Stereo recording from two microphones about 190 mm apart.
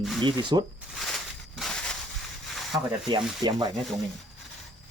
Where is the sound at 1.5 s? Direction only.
Centre (ahead or behind).